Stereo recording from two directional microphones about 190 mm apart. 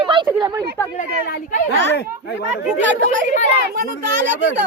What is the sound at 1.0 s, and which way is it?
Speech, 50° left (ahead or behind).